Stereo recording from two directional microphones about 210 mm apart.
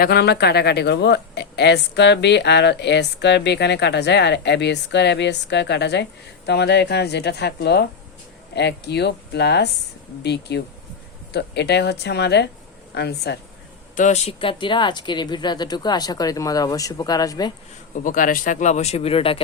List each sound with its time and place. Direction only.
0.0 s speech: 50° left (ahead or behind)
13.9 s speech: 35° left (ahead or behind); by 17.5 s 20° left (ahead or behind)
17.9 s speech: 40° left (ahead or behind)